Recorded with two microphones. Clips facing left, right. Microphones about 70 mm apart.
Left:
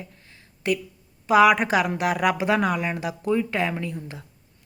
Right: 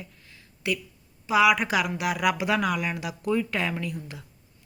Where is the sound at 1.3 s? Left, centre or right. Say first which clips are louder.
Left 4 dB; left.